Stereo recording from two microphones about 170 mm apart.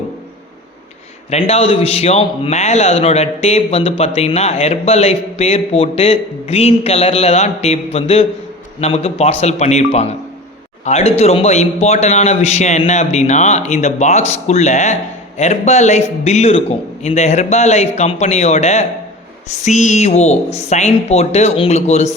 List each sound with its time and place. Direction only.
1.3 s speech: 40° left (ahead or behind)